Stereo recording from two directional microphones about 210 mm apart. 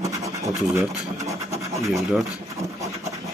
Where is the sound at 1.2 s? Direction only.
15° right (ahead or behind).